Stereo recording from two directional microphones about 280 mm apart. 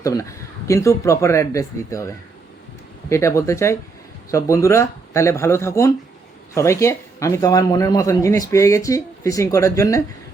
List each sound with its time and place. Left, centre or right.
0.0 s a man's voice: centre
3.1 s a man's voice: centre